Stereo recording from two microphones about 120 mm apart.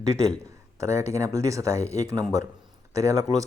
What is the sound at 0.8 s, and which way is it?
Speech, 25° right (ahead or behind).